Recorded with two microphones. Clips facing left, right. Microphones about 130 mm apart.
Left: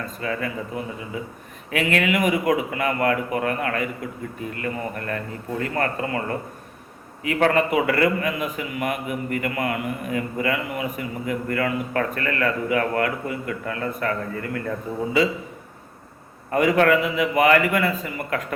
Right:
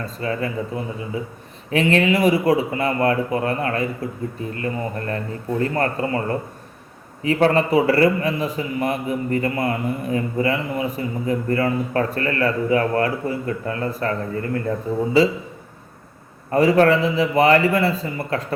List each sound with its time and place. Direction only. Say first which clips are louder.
0.0 s a man's voice: right 3 dB; 30° right (ahead or behind)
16.5 s a man's voice: right 3 dB; 30° right (ahead or behind)